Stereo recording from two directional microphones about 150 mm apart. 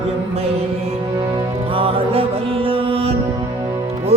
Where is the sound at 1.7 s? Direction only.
35° right (ahead or behind).